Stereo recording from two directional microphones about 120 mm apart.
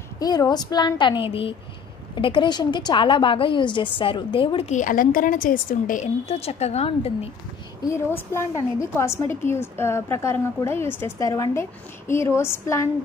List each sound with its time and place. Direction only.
0.2 s a woman's voice: 35° left (ahead or behind)
4.6 s a woman's voice: 90° left; by 7.2 s 55° left (ahead or behind)
7.9 s a woman's voice: 20° left (ahead or behind)